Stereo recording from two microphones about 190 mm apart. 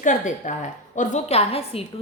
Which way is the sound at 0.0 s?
40° left (ahead or behind).